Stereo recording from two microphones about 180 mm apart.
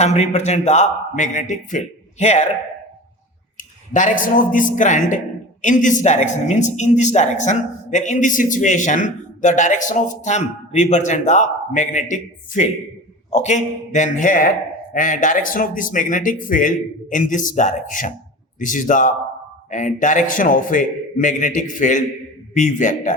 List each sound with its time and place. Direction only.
0.0 s speech: 40° left (ahead or behind)
3.6 s a woman's voice: 45° left (ahead or behind)